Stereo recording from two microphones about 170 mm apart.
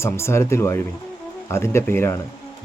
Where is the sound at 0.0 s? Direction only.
15° left (ahead or behind).